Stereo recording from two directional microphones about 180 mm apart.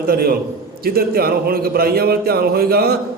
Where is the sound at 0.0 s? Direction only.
55° right (ahead or behind).